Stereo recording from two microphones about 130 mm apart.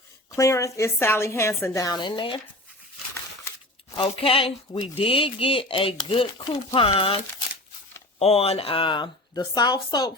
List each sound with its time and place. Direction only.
0.3 s a woman's voice: 25° left (ahead or behind); by 2.4 s 40° left (ahead or behind)
3.9 s speech: 45° left (ahead or behind)
8.2 s a woman's voice: 50° left (ahead or behind); by 10.1 s 30° left (ahead or behind)